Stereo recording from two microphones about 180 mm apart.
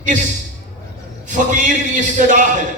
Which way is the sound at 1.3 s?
45° right (ahead or behind).